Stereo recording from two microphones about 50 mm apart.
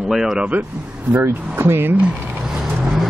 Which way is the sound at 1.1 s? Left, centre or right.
Right.